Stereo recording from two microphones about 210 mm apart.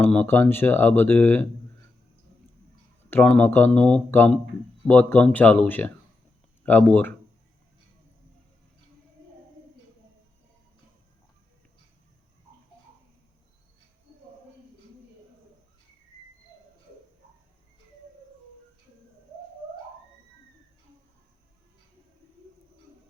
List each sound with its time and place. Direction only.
0.0 s speech: 10° left (ahead or behind)
3.1 s speech: 10° left (ahead or behind)